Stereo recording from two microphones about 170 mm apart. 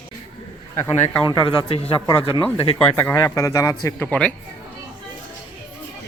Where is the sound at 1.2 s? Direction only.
30° left (ahead or behind).